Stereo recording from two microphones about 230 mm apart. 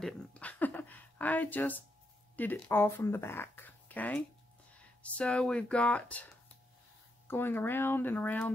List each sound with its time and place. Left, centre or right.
0.0 s speech: centre
7.2 s speech: centre